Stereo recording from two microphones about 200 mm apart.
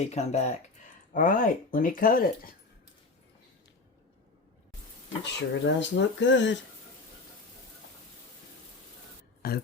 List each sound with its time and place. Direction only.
0.0 s speech: 30° left (ahead or behind)
5.4 s speech: 65° left (ahead or behind)
9.4 s speech: 50° left (ahead or behind)